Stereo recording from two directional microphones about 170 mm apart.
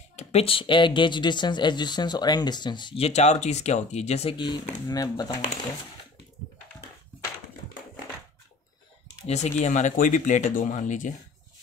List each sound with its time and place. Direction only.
0.1 s speech: 40° left (ahead or behind)
3.1 s speech: 40° left (ahead or behind); by 5.4 s 20° left (ahead or behind)
9.3 s speech: 40° left (ahead or behind)